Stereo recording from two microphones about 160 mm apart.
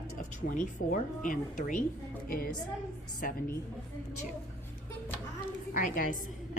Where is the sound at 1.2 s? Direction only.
55° left (ahead or behind).